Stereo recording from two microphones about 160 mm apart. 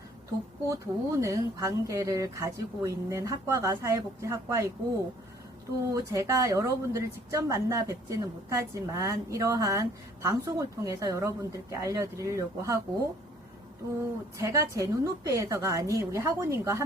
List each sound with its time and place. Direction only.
0.7 s speech: 20° right (ahead or behind)
14.3 s speech: 20° right (ahead or behind)